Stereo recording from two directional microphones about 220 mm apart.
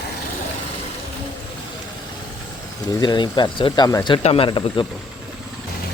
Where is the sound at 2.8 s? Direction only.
20° left (ahead or behind).